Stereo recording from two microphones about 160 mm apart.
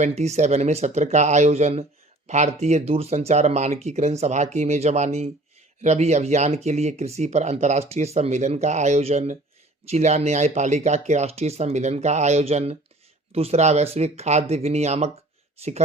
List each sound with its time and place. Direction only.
0.0 s speech: 45° right (ahead or behind)